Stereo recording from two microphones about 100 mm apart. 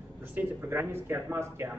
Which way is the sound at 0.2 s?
20° right (ahead or behind).